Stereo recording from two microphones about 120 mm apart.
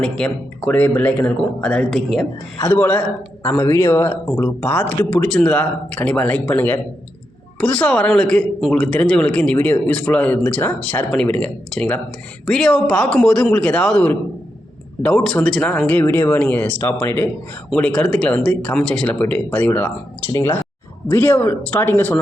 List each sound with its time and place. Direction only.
0.0 s speech: 10° left (ahead or behind)
2.6 s speech: 15° left (ahead or behind)